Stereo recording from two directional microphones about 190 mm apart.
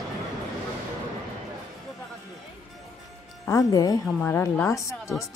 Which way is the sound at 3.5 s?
20° left (ahead or behind).